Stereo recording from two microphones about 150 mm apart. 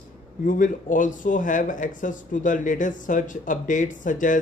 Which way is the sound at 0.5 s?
60° left (ahead or behind).